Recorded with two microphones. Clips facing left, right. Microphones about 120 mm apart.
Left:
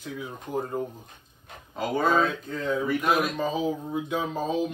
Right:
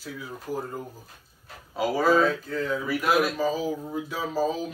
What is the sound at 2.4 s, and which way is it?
Speech, 20° left (ahead or behind).